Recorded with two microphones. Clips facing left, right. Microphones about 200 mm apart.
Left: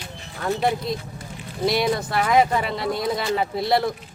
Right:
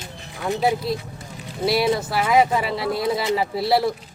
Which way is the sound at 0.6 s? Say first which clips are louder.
Right 4 dB; 5° right (ahead or behind).